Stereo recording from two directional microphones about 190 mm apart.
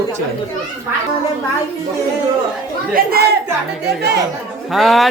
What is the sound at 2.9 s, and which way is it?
Speech, 55° right (ahead or behind).